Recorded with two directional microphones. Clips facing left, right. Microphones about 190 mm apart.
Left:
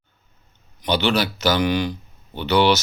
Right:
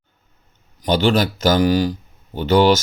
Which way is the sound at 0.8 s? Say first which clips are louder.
Right 4 dB; 45° right (ahead or behind).